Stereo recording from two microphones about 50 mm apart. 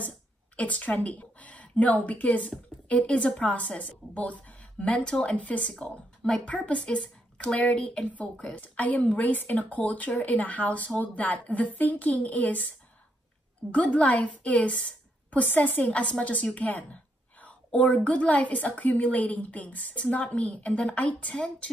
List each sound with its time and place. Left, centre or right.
0.6 s a woman's voice: left
8.1 s a woman's voice: left
13.7 s a woman's voice: left
16.5 s a sound: left
17.7 s a woman's voice: left